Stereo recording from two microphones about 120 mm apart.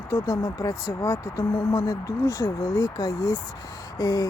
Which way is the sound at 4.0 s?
30° left (ahead or behind).